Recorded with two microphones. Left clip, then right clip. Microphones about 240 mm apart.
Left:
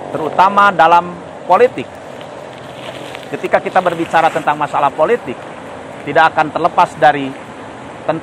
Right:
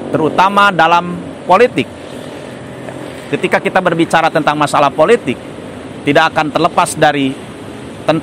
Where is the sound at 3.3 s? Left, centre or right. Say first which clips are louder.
Right 1 dB; right.